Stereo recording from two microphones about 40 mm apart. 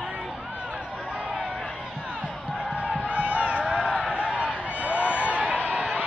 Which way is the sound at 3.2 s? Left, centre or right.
Right.